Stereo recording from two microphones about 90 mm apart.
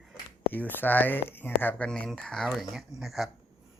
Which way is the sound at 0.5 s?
20° left (ahead or behind).